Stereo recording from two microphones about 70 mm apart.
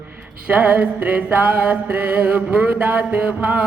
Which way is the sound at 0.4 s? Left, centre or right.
Right.